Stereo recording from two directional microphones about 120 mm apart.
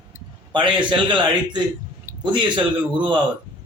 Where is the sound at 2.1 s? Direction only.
20° right (ahead or behind).